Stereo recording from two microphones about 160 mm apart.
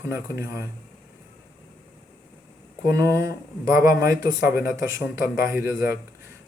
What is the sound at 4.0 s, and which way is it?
Speech, 70° left (ahead or behind).